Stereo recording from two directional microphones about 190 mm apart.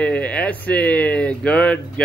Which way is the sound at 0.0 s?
5° left (ahead or behind).